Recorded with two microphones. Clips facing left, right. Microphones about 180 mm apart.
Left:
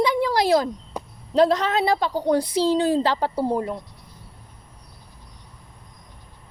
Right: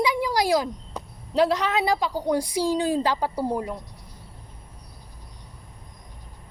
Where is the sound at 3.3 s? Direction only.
25° left (ahead or behind).